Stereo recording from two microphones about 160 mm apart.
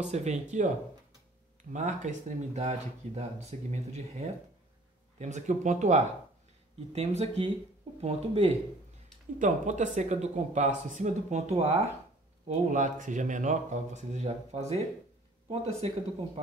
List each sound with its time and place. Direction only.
0.0 s speech: 45° right (ahead or behind)